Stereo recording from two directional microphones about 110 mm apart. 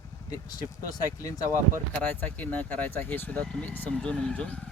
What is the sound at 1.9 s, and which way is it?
Speech, 15° left (ahead or behind).